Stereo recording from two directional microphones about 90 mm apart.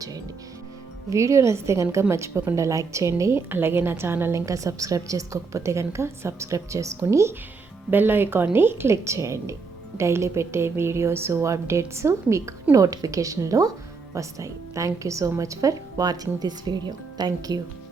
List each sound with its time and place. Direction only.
1.1 s a woman's voice: 35° right (ahead or behind)